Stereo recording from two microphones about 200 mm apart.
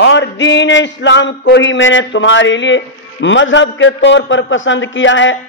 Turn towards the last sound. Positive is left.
turn(degrees=70)  # may be behind; listen again after turning